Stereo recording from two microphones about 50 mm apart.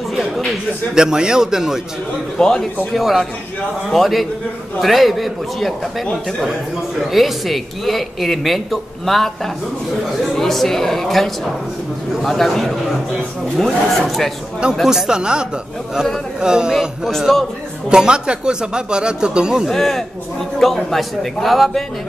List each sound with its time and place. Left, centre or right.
0.9 s speech: centre
2.3 s a man's voice: centre
2.9 s speech: centre
10.3 s speech: centre
14.9 s speech: centre
17.3 s speech: centre
17.8 s speech: centre
19.7 s a man's voice: centre